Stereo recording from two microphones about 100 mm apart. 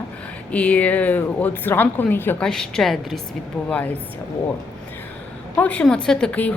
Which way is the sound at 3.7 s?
15° left (ahead or behind).